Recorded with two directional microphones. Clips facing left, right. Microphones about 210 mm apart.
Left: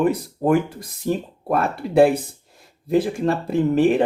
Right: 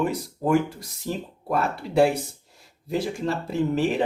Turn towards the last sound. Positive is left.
turn(degrees=55)  # may be behind; listen again after turning